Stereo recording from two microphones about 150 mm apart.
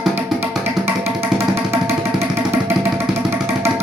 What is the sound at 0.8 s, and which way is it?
Music, 15° right (ahead or behind).